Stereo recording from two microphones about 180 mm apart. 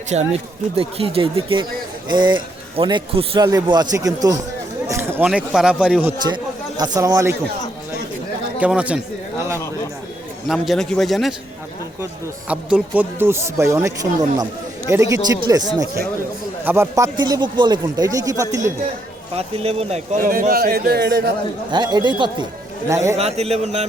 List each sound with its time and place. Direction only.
0.1 s a man's voice: 35° right (ahead or behind); by 6.1 s 5° right (ahead or behind)
6.2 s speech: 20° right (ahead or behind)
8.6 s speech: 5° right (ahead or behind)
10.5 s a man's voice: centre (ahead or behind)
12.5 s a man's voice: 10° right (ahead or behind)
19.4 s speech: 35° right (ahead or behind)
20.2 s a man's voice: 50° right (ahead or behind)
21.7 s a man's voice: 25° right (ahead or behind)
23.1 s speech: 35° right (ahead or behind)